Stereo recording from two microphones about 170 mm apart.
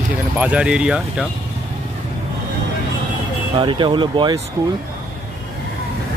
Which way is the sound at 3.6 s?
30° right (ahead or behind).